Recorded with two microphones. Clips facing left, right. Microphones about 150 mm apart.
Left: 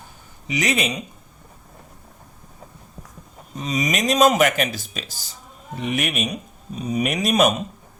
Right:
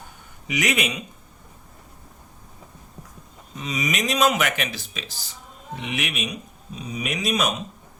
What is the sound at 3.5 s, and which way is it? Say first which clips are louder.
Speech: left 3 dB; 40° left (ahead or behind).